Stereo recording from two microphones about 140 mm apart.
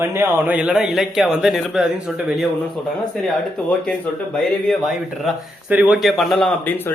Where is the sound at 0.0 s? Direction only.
15° right (ahead or behind).